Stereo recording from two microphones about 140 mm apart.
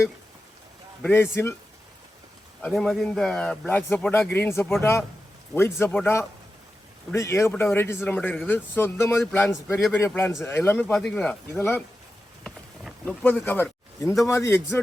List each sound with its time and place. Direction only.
1.0 s a man's voice: 15° left (ahead or behind)
2.6 s a man's voice: 10° left (ahead or behind)
12.4 s a sound: 5° left (ahead or behind)
13.4 s a man's voice: 15° left (ahead or behind)